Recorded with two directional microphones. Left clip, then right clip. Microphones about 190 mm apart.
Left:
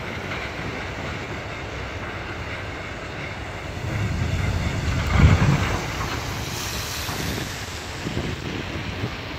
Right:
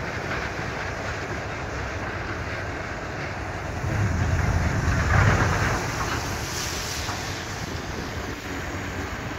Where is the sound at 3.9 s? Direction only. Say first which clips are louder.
Right 1 dB; 60° left (ahead or behind).